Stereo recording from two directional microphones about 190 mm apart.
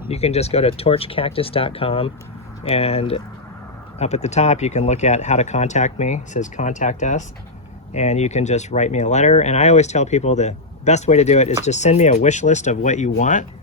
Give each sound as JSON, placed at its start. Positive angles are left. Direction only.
{"t": 0.1, "sound": "speech", "side_deg": 35}